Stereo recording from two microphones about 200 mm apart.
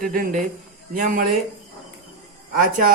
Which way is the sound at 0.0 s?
40° right (ahead or behind).